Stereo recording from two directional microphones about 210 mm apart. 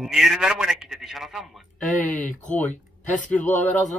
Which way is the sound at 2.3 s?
35° left (ahead or behind).